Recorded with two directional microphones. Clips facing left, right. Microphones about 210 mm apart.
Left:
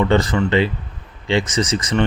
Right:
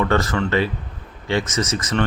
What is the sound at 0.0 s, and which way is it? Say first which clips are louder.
Speech: left 3 dB; 15° left (ahead or behind).